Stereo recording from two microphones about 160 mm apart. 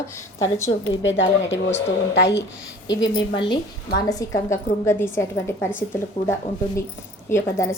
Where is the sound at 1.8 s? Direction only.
90° left.